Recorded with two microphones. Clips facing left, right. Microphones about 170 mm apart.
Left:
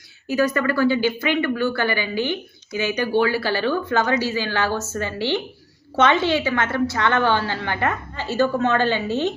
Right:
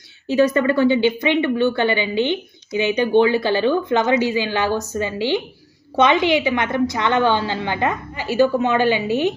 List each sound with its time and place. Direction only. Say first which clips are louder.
0.3 s a woman's voice: right 4 dB; 25° right (ahead or behind)